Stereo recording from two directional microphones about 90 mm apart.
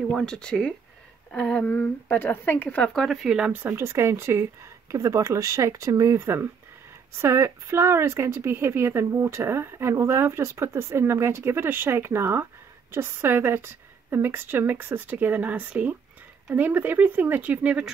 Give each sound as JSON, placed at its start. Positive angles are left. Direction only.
{"t": 0.1, "sound": "a woman's voice", "side_deg": 5}
{"t": 2.9, "sound": "speech", "side_deg": 0}
{"t": 3.6, "sound": "speech", "side_deg": -30}